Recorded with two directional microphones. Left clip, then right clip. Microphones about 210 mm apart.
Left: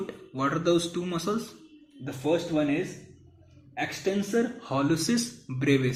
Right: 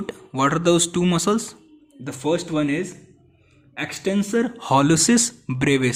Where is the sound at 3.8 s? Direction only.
50° right (ahead or behind).